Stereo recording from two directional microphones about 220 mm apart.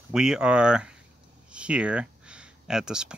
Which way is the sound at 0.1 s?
5° right (ahead or behind).